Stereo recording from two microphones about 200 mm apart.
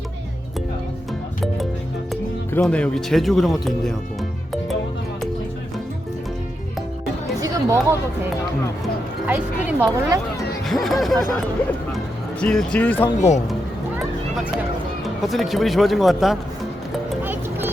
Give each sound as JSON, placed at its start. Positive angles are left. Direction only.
{"t": 2.5, "sound": "speech", "side_deg": 10}
{"t": 7.4, "sound": "chatter", "side_deg": -15}
{"t": 9.2, "sound": "speech", "side_deg": -10}
{"t": 10.7, "sound": "speech", "side_deg": 0}
{"t": 12.4, "sound": "speech", "side_deg": 5}
{"t": 13.1, "sound": "speech", "side_deg": 35}
{"t": 15.0, "sound": "speech", "side_deg": 0}
{"t": 17.1, "sound": "music", "side_deg": -10}